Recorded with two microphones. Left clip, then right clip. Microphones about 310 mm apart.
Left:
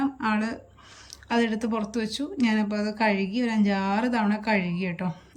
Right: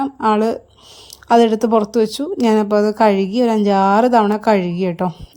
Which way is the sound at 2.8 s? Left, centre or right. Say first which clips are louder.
Right 13 dB; right.